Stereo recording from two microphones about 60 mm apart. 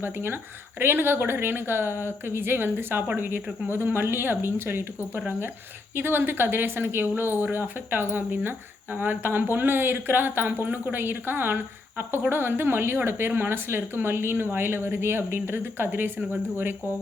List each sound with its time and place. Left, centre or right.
0.0 s speech: right